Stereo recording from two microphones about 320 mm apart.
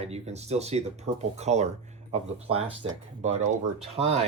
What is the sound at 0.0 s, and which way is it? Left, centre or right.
Speech, centre.